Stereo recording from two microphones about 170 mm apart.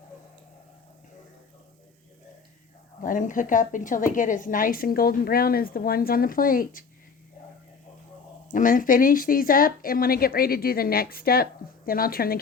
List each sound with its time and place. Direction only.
3.0 s a woman's voice: 50° left (ahead or behind)
8.4 s a woman's voice: 50° left (ahead or behind)